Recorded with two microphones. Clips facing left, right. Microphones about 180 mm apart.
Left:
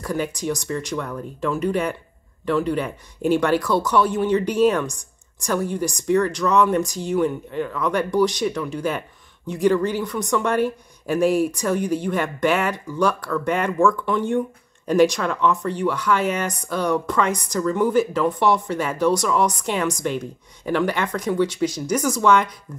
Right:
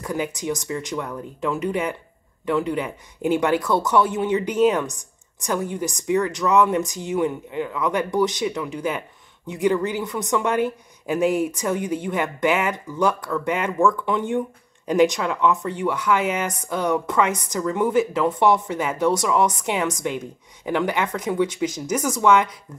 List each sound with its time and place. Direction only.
0.0 s speech: 20° right (ahead or behind)